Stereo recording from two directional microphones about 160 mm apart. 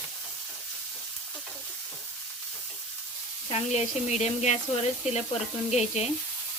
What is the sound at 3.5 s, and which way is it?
Speech, 45° left (ahead or behind).